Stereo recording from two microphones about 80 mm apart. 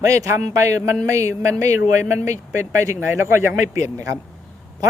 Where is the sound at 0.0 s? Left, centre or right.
Right.